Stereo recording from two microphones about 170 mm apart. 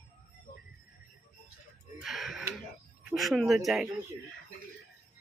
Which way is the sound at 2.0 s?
Centre (ahead or behind).